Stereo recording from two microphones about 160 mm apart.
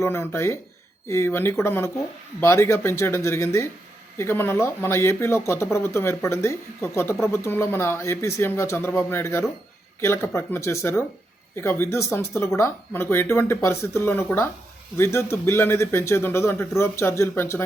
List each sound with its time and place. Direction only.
0.0 s speech: 15° left (ahead or behind)